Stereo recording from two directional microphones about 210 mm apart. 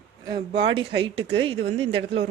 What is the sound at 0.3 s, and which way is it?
A woman's voice, 20° right (ahead or behind).